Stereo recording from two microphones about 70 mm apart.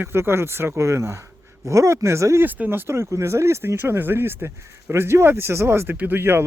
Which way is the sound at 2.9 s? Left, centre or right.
Right.